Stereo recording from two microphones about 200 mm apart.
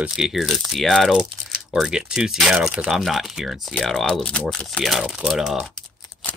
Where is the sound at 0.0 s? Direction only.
Centre (ahead or behind).